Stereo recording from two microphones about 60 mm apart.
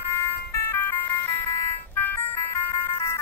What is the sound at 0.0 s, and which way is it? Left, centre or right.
Music, left.